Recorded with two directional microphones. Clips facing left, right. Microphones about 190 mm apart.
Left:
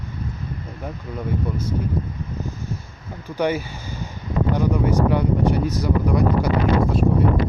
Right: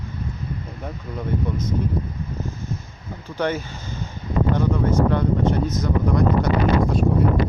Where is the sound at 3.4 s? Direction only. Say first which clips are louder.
Left 2 dB; 10° left (ahead or behind).